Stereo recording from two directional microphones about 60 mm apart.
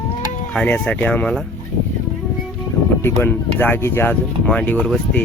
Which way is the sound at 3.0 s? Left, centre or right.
Left.